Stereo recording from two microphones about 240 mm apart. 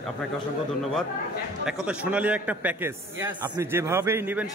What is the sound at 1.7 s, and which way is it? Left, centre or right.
A man's voice, centre.